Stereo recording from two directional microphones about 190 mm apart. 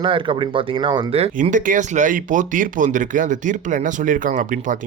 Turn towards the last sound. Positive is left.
turn(degrees=-45)  # may be behind; listen again after turning